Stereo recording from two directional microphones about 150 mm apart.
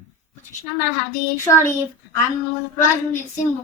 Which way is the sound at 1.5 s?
20° left (ahead or behind).